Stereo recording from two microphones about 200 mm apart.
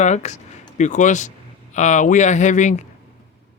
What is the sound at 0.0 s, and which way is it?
Speech, 35° left (ahead or behind).